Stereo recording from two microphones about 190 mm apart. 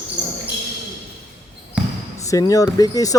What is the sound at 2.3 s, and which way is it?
Speech, 20° left (ahead or behind).